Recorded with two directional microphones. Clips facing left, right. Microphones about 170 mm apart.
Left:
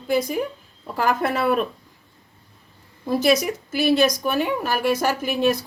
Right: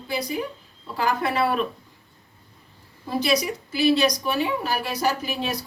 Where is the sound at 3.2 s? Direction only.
45° left (ahead or behind).